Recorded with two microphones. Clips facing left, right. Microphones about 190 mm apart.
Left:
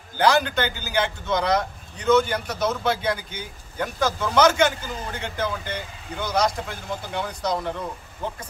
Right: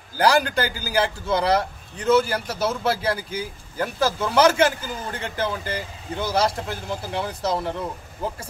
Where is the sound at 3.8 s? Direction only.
30° right (ahead or behind).